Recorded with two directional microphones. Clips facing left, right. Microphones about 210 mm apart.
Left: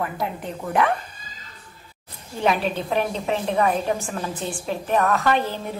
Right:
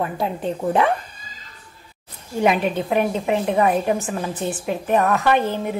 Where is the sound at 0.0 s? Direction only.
30° right (ahead or behind).